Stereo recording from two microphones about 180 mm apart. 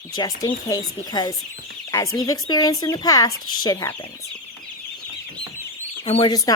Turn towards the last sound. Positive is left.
turn(degrees=20)  # may be behind; listen again after turning